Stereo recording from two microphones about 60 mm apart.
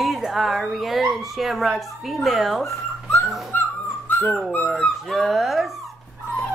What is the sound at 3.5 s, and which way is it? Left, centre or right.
Dog, left.